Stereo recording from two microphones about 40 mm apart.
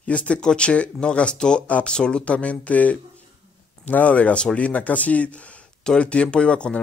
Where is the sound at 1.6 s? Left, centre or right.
Left.